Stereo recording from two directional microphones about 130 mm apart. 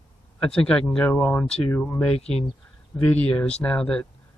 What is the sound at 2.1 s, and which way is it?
Speech, 50° left (ahead or behind).